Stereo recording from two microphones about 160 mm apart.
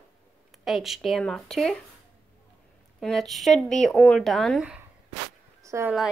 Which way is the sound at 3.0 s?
Centre (ahead or behind).